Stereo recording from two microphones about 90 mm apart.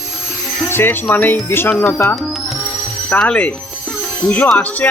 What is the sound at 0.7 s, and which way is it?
Speech, 25° left (ahead or behind).